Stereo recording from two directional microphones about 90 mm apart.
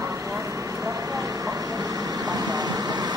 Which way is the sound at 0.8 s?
40° right (ahead or behind).